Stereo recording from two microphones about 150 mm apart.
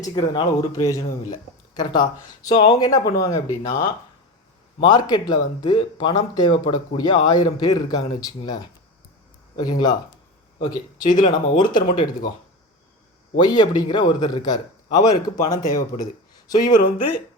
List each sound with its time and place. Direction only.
0.0 s speech: 25° left (ahead or behind)
9.6 s speech: 25° left (ahead or behind)
13.3 s speech: 30° left (ahead or behind)